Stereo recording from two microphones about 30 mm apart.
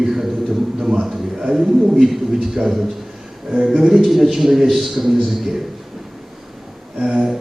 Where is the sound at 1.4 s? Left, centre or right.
Centre.